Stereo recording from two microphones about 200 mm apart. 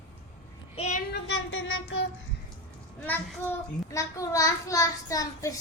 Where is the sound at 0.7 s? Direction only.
30° left (ahead or behind).